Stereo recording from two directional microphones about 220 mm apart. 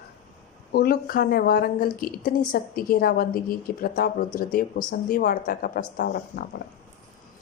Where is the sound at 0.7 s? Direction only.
45° left (ahead or behind).